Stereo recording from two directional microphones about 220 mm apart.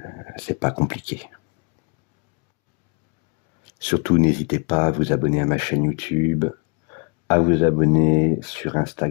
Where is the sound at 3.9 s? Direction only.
25° left (ahead or behind).